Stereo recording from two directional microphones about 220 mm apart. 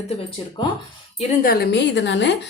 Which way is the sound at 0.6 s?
20° left (ahead or behind).